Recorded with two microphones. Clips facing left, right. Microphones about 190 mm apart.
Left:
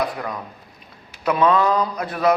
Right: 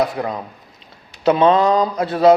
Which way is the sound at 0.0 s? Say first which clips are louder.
Right 5 dB; 25° right (ahead or behind).